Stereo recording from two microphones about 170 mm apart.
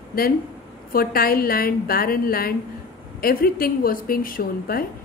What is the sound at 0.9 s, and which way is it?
A woman's voice, 60° left (ahead or behind).